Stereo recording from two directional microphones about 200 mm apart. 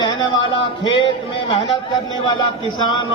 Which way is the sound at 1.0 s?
25° left (ahead or behind).